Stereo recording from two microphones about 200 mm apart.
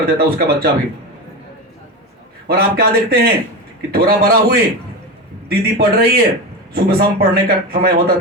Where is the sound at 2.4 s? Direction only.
50° right (ahead or behind).